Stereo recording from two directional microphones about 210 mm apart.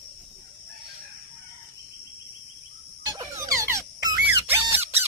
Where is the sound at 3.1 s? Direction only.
15° right (ahead or behind).